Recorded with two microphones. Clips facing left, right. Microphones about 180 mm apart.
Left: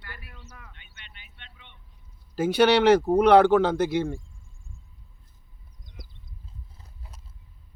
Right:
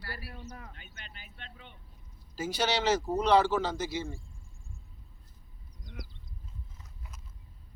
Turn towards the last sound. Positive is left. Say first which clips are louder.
# left 1 dB
turn(degrees=30)  # may be behind; listen again after turning